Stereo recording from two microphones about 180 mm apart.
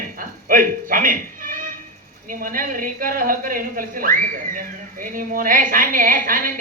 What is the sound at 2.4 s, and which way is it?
A woman's voice, 50° right (ahead or behind).